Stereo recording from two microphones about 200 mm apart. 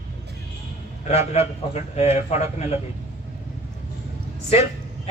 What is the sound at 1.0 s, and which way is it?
A man's voice, 30° left (ahead or behind).